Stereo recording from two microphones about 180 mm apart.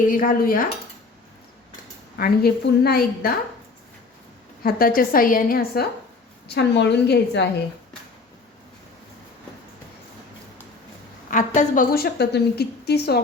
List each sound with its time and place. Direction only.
0.1 s a woman's voice: 50° left (ahead or behind)
2.1 s a woman's voice: 55° left (ahead or behind)
4.6 s a woman's voice: 55° left (ahead or behind)
6.5 s a woman's voice: 70° left (ahead or behind)
11.3 s a woman's voice: 45° left (ahead or behind); by 13.1 s 65° left (ahead or behind)